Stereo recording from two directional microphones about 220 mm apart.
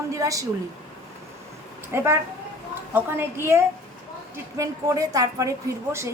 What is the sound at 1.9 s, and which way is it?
A woman's voice, 10° right (ahead or behind).